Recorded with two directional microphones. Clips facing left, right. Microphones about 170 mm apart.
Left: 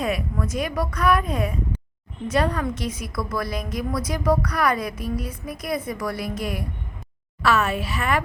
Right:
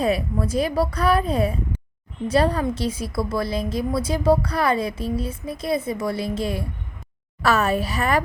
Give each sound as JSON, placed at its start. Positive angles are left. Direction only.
{"t": 0.0, "sound": "a woman's voice", "side_deg": -30}
{"t": 7.4, "sound": "a woman's voice", "side_deg": -40}